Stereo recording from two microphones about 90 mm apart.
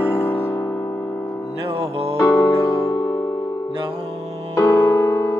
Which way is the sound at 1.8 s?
90° right.